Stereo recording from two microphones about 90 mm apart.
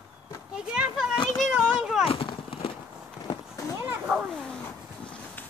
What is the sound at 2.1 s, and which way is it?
Clip-clop, 90° left.